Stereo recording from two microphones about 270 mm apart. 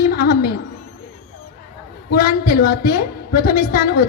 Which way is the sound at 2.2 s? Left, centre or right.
Left.